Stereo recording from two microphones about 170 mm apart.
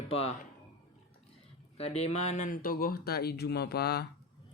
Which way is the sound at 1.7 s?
35° left (ahead or behind).